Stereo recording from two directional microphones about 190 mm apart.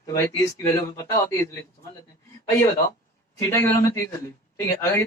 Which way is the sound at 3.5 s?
15° left (ahead or behind).